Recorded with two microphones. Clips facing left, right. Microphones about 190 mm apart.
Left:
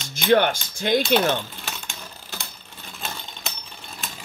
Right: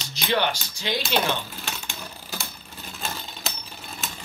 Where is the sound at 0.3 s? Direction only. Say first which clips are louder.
Left 7 dB; 50° left (ahead or behind).